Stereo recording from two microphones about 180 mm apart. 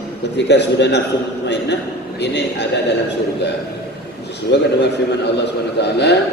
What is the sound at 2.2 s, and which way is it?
Speech, 70° left (ahead or behind).